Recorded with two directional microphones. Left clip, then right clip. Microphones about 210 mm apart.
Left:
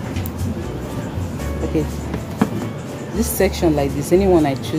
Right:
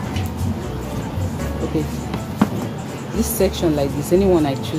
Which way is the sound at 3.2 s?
10° left (ahead or behind).